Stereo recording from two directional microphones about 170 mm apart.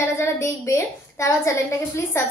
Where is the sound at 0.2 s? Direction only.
15° left (ahead or behind).